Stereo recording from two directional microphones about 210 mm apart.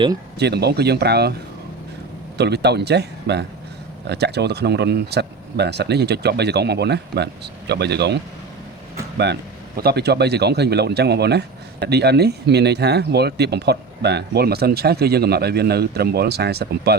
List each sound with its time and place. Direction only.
0.3 s speech: 50° right (ahead or behind)
2.4 s speech: 55° right (ahead or behind)